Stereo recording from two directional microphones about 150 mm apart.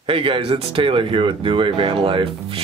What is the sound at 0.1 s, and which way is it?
Speech, 35° right (ahead or behind).